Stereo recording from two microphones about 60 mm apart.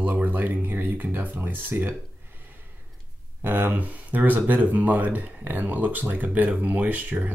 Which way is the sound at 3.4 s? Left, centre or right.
Right.